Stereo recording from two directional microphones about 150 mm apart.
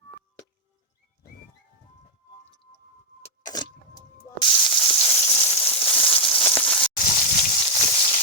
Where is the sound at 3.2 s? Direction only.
25° left (ahead or behind).